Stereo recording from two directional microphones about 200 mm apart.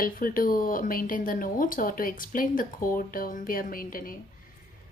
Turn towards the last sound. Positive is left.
turn(degrees=45)  # may be behind; listen again after turning